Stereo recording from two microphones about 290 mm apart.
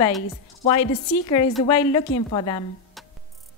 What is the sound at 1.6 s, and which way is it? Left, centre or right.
A woman's voice, centre.